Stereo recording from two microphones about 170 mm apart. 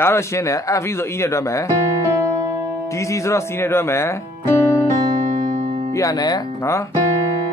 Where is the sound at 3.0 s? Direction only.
15° left (ahead or behind).